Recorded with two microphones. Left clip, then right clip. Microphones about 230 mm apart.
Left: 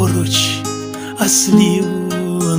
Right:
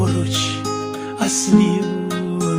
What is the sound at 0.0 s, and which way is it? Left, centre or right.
Music, left.